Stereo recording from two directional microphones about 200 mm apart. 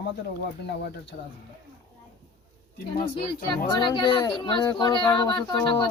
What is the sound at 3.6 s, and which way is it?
Speech, 20° left (ahead or behind).